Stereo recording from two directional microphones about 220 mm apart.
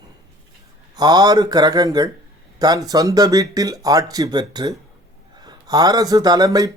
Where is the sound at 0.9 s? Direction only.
20° right (ahead or behind).